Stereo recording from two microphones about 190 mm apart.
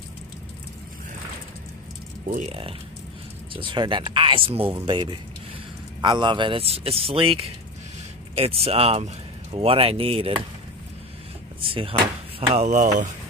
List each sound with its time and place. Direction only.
2.3 s speech: 30° right (ahead or behind)
11.6 s speech: 25° right (ahead or behind)